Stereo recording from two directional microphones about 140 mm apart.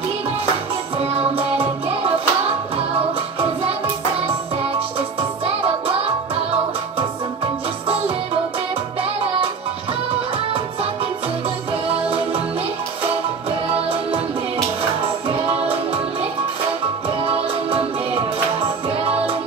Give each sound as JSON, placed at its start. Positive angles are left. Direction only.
{"t": 0.9, "sound": "music", "side_deg": -45}
{"t": 5.6, "sound": "music", "side_deg": -40}
{"t": 13.7, "sound": "music", "side_deg": -45}
{"t": 17.2, "sound": "music", "side_deg": -40}